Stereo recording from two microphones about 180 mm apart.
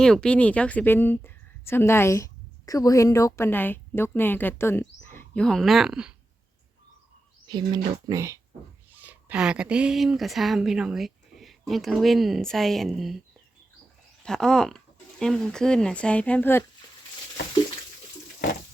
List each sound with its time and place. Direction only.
0.0 s a woman's voice: 5° left (ahead or behind)
7.4 s speech: 25° right (ahead or behind); by 13.2 s centre (ahead or behind)
14.3 s speech: 5° left (ahead or behind)